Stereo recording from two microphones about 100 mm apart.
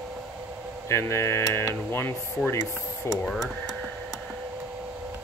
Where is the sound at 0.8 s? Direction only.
30° left (ahead or behind).